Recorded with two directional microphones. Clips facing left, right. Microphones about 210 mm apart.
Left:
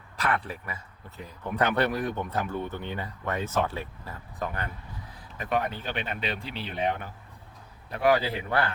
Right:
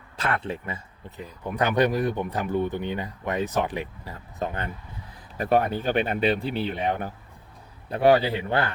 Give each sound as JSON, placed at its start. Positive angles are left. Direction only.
{"t": 0.2, "sound": "speech", "side_deg": -25}
{"t": 5.4, "sound": "speech", "side_deg": -35}
{"t": 6.4, "sound": "speech", "side_deg": -50}
{"t": 7.9, "sound": "a man's voice", "side_deg": -30}